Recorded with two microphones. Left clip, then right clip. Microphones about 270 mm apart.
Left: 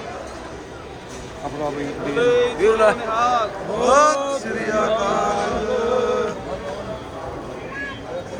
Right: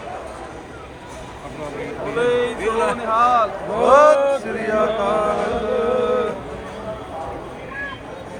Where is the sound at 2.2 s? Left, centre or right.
Right.